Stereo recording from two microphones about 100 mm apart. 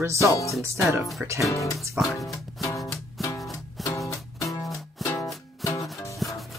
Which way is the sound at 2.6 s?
30° left (ahead or behind).